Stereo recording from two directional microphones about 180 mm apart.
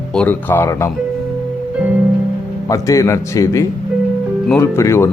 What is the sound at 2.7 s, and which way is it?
Speech, 20° left (ahead or behind).